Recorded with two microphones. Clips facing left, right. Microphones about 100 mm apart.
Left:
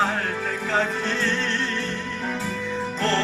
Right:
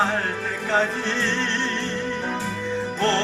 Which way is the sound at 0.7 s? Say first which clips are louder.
Right 2 dB; 30° right (ahead or behind).